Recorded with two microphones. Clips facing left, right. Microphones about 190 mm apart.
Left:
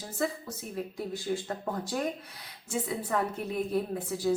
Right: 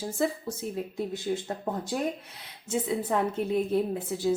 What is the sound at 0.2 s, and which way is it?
A woman's voice, 25° right (ahead or behind).